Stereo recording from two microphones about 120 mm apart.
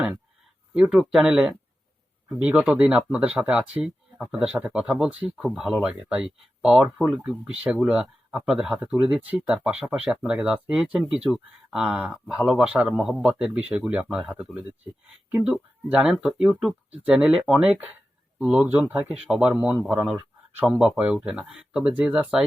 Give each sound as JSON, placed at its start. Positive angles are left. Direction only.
{"t": 0.7, "sound": "speech", "side_deg": -5}